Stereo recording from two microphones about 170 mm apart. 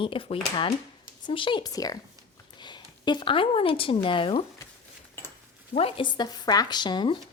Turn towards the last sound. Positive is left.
turn(degrees=25)  # may be behind; listen again after turning